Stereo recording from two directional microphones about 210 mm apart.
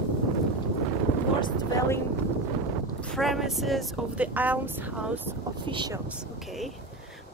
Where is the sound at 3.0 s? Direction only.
Centre (ahead or behind).